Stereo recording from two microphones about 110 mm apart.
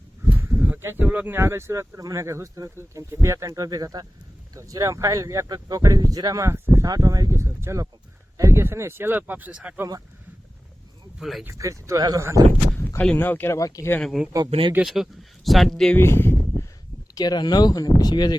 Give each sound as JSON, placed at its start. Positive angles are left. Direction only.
{"t": 0.3, "sound": "a sound", "side_deg": -15}
{"t": 0.8, "sound": "speech", "side_deg": -20}
{"t": 11.2, "sound": "speech", "side_deg": 0}
{"t": 11.5, "sound": "speech", "side_deg": -30}
{"t": 13.0, "sound": "speech", "side_deg": 15}
{"t": 13.6, "sound": "speech", "side_deg": 30}
{"t": 14.0, "sound": "speech", "side_deg": 0}
{"t": 14.5, "sound": "speech", "side_deg": -60}
{"t": 14.8, "sound": "speech", "side_deg": 0}
{"t": 16.0, "sound": "a sound", "side_deg": 20}
{"t": 17.2, "sound": "speech", "side_deg": 40}